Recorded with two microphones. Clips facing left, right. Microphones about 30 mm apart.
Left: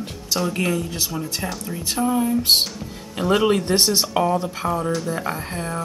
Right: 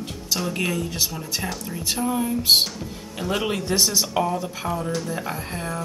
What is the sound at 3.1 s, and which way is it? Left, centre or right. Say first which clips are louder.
Speech: left 7 dB; centre.